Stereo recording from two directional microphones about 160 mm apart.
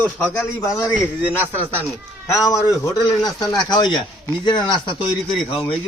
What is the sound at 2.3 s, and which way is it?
A man's voice, 20° left (ahead or behind).